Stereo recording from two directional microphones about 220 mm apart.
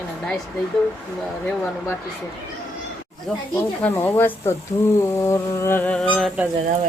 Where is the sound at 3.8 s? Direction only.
10° left (ahead or behind).